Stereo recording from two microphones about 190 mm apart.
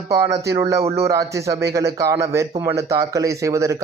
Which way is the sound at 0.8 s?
30° right (ahead or behind).